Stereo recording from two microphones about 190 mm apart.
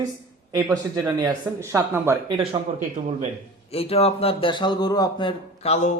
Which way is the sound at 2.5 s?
25° right (ahead or behind).